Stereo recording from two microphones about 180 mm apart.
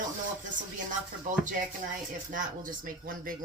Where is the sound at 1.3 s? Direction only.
45° right (ahead or behind).